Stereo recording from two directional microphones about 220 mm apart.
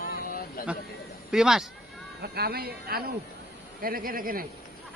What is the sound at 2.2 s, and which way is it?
A man's voice, 45° right (ahead or behind).